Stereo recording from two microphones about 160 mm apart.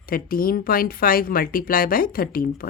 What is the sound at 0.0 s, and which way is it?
A woman's voice, 65° left (ahead or behind).